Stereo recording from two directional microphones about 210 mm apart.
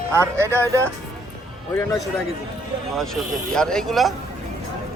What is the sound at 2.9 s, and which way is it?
Speech, centre (ahead or behind).